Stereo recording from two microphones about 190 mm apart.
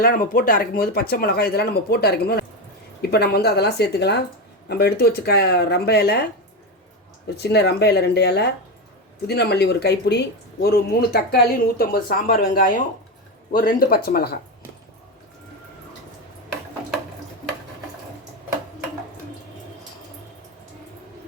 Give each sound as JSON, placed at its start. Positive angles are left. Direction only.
{"t": 0.0, "sound": "speech", "side_deg": 50}
{"t": 7.3, "sound": "speech", "side_deg": 60}